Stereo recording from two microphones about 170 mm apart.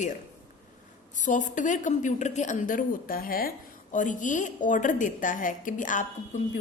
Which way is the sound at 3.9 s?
50° left (ahead or behind).